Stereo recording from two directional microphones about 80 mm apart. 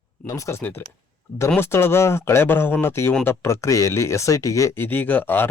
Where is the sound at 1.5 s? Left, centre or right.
Left.